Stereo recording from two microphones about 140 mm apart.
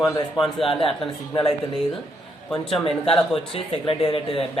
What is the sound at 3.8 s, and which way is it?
Speech, 40° left (ahead or behind).